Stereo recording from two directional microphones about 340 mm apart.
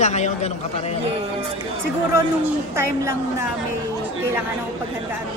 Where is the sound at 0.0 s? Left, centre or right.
Centre.